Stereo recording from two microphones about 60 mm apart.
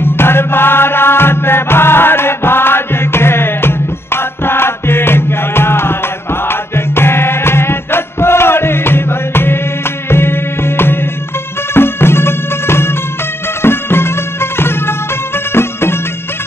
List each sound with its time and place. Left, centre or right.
0.0 s music: left